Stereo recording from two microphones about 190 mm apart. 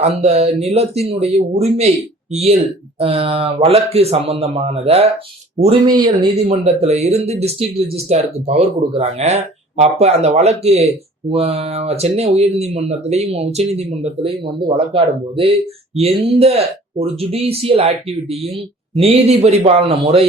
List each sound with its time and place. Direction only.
0.0 s speech: 35° right (ahead or behind)
6.3 s speech: 35° right (ahead or behind)